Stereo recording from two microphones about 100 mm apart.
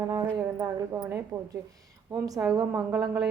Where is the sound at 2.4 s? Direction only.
20° right (ahead or behind).